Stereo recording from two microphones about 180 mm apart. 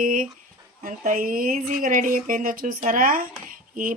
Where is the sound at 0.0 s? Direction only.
50° right (ahead or behind).